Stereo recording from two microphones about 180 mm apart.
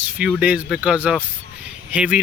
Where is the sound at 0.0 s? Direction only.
5° right (ahead or behind).